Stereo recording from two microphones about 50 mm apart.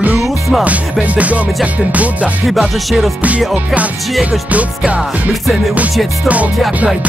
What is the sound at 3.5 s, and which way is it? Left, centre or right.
Music, right.